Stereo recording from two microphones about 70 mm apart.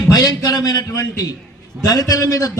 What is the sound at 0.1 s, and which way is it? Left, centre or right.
A man's voice, left.